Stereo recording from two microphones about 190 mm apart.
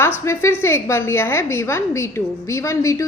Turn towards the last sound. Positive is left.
turn(degrees=15)  # may be behind; listen again after turning